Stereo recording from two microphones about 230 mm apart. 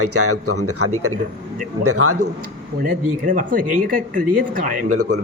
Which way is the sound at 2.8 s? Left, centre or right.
Right.